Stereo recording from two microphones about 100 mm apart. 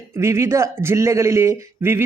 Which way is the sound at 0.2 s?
25° right (ahead or behind).